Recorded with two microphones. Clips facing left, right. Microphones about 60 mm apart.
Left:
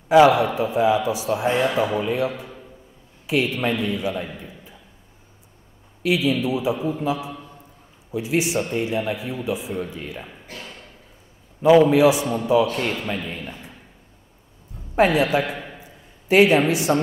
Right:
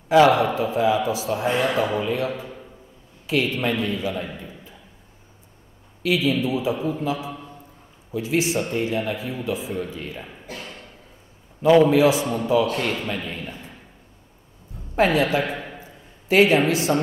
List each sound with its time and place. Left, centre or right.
0.1 s a man's voice: centre
6.0 s a man's voice: centre
6.3 s a man's voice: centre
11.6 s a man's voice: centre
15.0 s a man's voice: centre
15.8 s a sound: centre